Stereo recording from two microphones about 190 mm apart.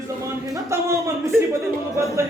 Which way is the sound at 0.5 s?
15° right (ahead or behind).